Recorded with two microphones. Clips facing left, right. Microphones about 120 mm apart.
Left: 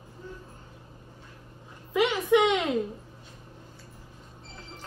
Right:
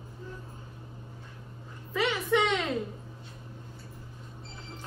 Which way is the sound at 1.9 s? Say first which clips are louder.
Left 5 dB; 15° left (ahead or behind).